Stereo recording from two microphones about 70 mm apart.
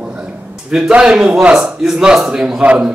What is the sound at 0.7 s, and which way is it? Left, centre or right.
A man's voice, centre.